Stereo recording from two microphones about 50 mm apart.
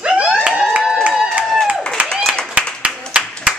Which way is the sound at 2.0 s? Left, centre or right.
Right.